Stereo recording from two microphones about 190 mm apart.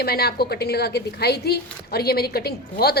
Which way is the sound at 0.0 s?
55° left (ahead or behind).